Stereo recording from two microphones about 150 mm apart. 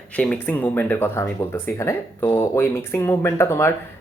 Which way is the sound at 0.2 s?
10° left (ahead or behind).